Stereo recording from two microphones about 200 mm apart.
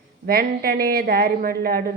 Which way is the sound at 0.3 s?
50° right (ahead or behind).